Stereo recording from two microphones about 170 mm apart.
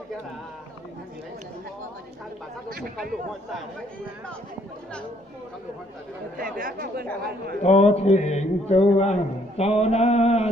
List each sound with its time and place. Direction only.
6.3 s speech: 55° right (ahead or behind)
7.6 s a man's voice: 40° left (ahead or behind)